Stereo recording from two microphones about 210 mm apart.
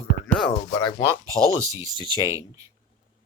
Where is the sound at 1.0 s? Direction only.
15° right (ahead or behind).